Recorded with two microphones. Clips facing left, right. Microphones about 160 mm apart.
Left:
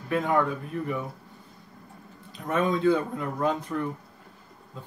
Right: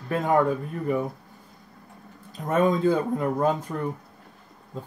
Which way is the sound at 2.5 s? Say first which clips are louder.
Right 3 dB; 40° right (ahead or behind).